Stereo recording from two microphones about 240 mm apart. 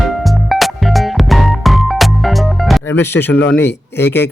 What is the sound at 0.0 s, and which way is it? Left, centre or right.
Music, centre.